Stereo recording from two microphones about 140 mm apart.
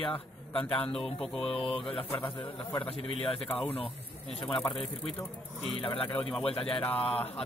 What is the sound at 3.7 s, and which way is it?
Speech, 45° left (ahead or behind).